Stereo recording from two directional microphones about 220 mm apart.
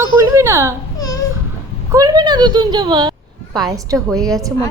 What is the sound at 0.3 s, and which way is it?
Speech, 10° right (ahead or behind).